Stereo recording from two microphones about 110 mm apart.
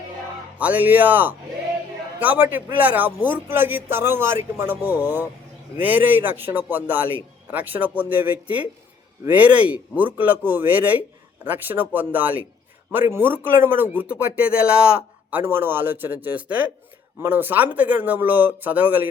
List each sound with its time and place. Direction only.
0.6 s a man's voice: 15° right (ahead or behind)